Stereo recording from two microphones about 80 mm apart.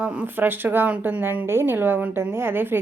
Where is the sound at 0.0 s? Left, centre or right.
Right.